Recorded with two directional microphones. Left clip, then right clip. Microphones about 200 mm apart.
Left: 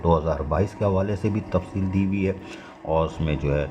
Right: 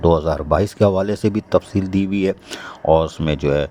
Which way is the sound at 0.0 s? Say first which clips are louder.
Right 6 dB; 45° right (ahead or behind).